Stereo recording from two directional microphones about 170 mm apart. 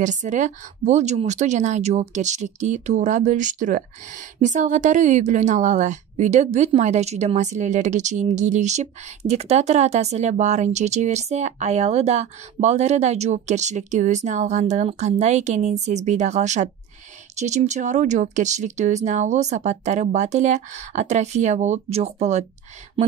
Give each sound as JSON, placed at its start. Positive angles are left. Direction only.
{"t": 0.0, "sound": "speech", "side_deg": -45}